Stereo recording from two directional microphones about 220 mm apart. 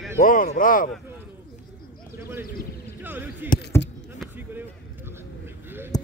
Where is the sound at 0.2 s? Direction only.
40° left (ahead or behind).